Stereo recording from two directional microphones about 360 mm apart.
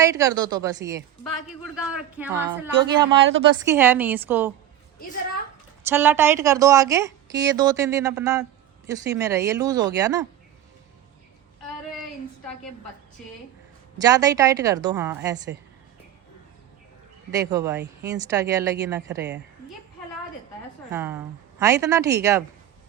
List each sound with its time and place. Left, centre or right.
0.0 s a woman's voice: centre
3.2 s a woman's voice: right
3.7 s speech: centre
5.9 s a woman's voice: centre
13.2 s speech: centre
14.0 s a woman's voice: centre
17.3 s a woman's voice: centre
20.9 s a woman's voice: centre